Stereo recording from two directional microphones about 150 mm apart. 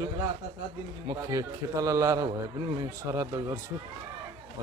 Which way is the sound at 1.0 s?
20° right (ahead or behind).